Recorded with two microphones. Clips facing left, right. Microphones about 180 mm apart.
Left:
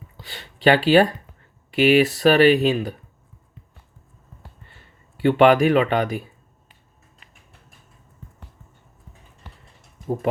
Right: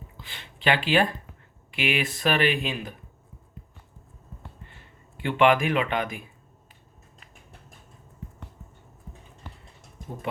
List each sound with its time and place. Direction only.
0.2 s speech: 40° left (ahead or behind)
5.2 s speech: 35° left (ahead or behind)